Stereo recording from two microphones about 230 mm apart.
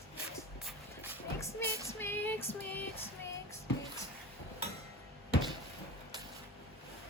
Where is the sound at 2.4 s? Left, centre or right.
Left.